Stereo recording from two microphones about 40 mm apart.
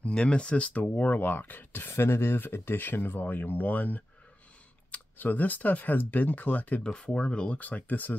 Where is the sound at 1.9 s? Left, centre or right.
Left.